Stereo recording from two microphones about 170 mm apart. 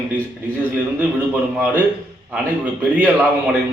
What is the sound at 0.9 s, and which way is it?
Speech, 10° right (ahead or behind).